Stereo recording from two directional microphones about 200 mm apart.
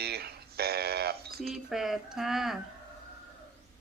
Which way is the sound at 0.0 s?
55° right (ahead or behind).